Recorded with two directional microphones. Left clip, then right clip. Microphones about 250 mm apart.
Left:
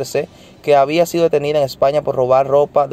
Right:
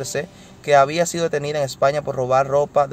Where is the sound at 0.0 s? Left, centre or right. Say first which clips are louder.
Left 6 dB; centre.